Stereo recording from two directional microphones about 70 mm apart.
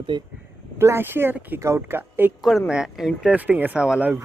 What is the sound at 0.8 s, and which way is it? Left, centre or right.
Speech, right.